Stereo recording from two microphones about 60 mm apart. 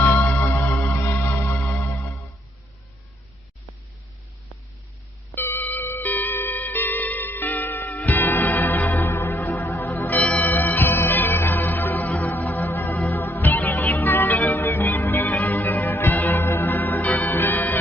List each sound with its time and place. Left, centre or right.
0.0 s music: left
5.3 s music: left